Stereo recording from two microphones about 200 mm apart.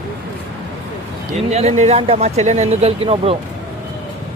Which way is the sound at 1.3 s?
35° right (ahead or behind).